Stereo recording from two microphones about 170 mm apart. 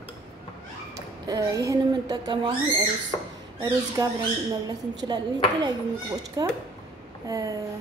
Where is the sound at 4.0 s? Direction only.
20° right (ahead or behind).